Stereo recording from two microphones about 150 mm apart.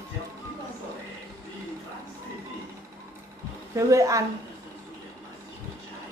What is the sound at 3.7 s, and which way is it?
Speech, 20° right (ahead or behind).